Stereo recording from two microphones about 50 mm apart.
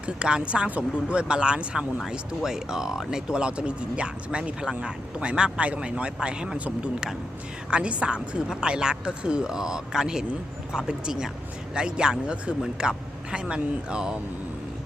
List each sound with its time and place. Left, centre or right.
0.0 s speech: right
7.7 s speech: right